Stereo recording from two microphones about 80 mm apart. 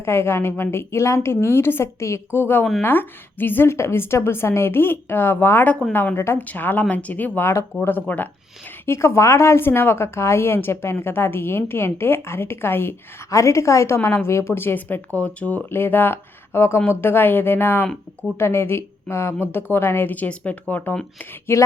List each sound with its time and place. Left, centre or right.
0.0 s a woman's voice: left
8.9 s a woman's voice: left
21.5 s a woman's voice: left